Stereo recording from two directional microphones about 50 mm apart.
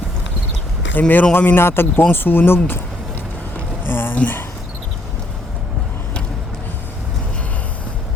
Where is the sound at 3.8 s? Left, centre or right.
Left.